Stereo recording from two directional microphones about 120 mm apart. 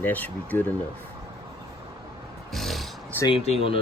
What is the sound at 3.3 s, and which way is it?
Speech, 55° left (ahead or behind).